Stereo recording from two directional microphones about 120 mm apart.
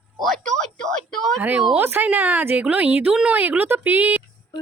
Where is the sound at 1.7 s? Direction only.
15° right (ahead or behind).